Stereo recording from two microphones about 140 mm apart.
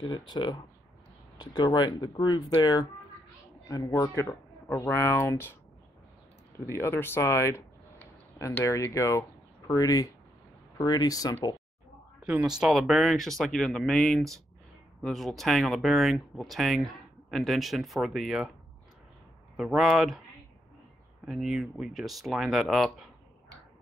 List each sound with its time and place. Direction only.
0.0 s speech: 30° left (ahead or behind); by 5.6 s 15° left (ahead or behind)
6.6 s speech: 20° left (ahead or behind)
12.3 s speech: 10° right (ahead or behind)
19.5 s speech: centre (ahead or behind)
21.3 s speech: centre (ahead or behind)